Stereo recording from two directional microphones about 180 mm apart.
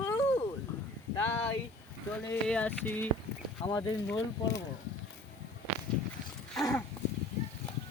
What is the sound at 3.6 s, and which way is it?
Speech, 20° left (ahead or behind).